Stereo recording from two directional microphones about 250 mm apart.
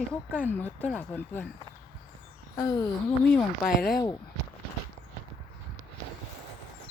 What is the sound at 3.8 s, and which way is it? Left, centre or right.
Speech, left.